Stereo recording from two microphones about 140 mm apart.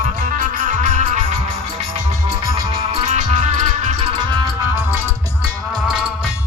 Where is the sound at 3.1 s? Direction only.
60° right (ahead or behind).